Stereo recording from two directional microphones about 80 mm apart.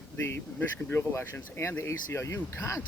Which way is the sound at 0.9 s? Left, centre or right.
Left.